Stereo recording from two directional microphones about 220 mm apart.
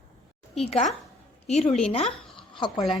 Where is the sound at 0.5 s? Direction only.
30° left (ahead or behind).